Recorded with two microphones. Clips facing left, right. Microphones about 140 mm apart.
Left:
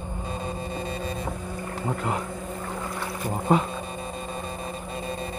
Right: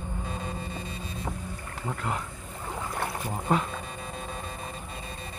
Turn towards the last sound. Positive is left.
turn(degrees=5)  # may be behind; listen again after turning